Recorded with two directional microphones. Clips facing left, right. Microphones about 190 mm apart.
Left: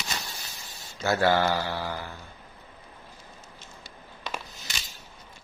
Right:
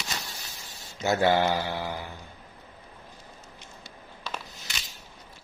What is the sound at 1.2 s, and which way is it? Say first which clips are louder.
Speech: even; 20° right (ahead or behind).